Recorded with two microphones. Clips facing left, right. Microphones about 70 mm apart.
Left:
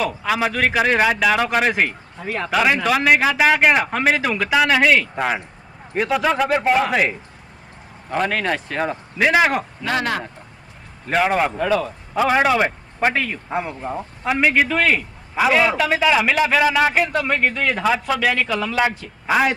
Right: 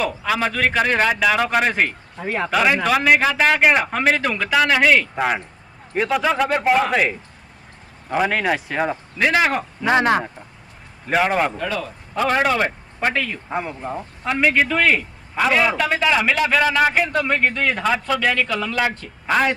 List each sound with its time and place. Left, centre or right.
0.0 s a man's voice: centre
2.1 s speech: centre
2.5 s a man's voice: centre
9.1 s speech: centre
9.8 s speech: right
11.1 s a man's voice: centre